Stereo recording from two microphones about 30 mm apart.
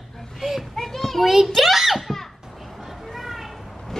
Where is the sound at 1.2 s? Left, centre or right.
Centre.